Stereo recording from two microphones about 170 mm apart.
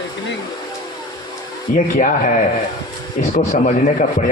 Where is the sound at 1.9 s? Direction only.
50° left (ahead or behind).